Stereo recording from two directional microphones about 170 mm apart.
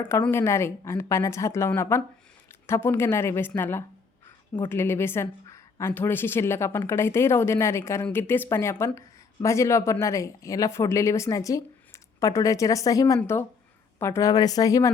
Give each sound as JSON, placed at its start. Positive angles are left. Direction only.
{"t": 0.2, "sound": "speech", "side_deg": 15}